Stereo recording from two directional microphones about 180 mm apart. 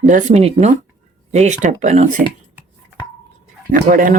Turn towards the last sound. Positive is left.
turn(degrees=-50)  # may be behind; listen again after turning